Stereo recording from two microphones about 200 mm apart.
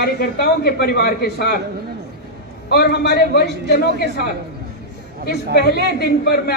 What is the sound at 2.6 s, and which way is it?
A man's voice, 50° left (ahead or behind).